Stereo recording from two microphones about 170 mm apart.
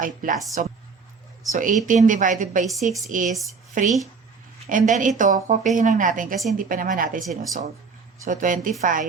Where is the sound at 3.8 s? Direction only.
50° right (ahead or behind).